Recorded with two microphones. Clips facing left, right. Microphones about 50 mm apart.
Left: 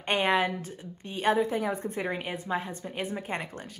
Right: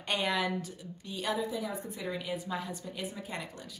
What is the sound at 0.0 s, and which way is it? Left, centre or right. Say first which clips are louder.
A woman's voice: left 6 dB; left.